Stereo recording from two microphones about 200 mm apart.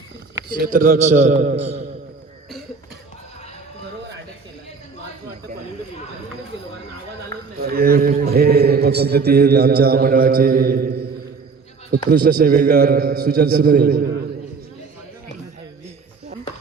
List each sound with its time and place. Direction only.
0.5 s a man's voice: 45° right (ahead or behind)
7.6 s a man's voice: 50° right (ahead or behind)